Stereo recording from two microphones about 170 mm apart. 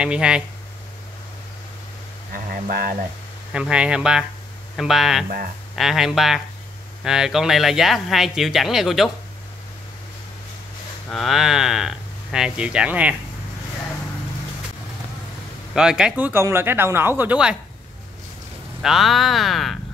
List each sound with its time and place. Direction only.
0.0 s speech: 5° right (ahead or behind)
2.3 s a sound: 55° right (ahead or behind)
3.5 s speech: 5° right (ahead or behind)
11.1 s speech: centre (ahead or behind)
15.7 s speech: 5° right (ahead or behind)
18.8 s speech: centre (ahead or behind)